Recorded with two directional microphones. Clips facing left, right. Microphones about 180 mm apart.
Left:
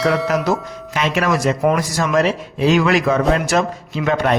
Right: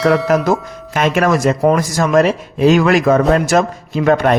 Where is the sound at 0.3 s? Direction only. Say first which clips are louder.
Right 4 dB; 50° right (ahead or behind).